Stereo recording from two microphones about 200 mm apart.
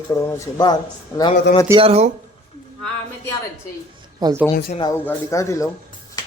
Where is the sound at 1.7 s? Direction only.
30° right (ahead or behind).